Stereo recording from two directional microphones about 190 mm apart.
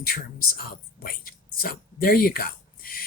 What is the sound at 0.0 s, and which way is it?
Speech, 50° left (ahead or behind).